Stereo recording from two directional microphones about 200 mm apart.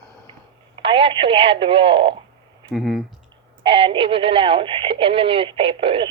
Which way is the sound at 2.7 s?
5° right (ahead or behind).